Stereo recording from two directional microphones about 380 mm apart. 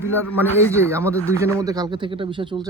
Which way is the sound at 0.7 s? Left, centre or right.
Centre.